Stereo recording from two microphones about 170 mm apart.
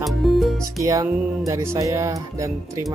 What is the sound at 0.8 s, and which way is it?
Speech, 20° right (ahead or behind).